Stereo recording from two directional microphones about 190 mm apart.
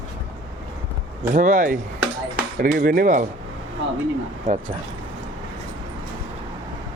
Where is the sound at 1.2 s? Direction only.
45° right (ahead or behind).